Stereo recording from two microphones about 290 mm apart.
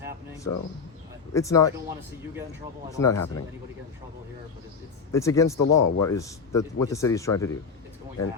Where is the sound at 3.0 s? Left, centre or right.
Centre.